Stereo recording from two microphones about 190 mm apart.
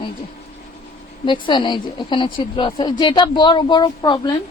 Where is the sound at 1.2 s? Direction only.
25° left (ahead or behind).